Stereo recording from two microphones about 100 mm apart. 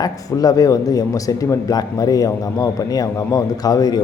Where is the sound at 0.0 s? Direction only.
40° left (ahead or behind).